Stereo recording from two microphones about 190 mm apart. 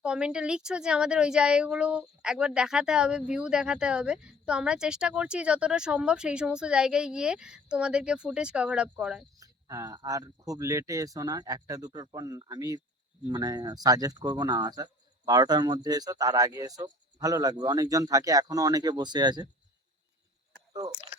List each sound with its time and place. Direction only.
0.0 s a woman's voice: 5° right (ahead or behind)
9.4 s speech: 20° right (ahead or behind)